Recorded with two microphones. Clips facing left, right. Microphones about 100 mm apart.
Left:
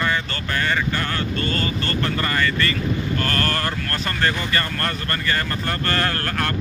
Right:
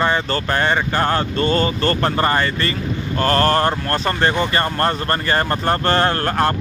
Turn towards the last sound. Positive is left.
turn(degrees=-30)  # may be behind; listen again after turning